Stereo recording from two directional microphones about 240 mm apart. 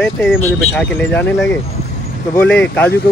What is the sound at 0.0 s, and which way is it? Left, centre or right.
Speech, centre.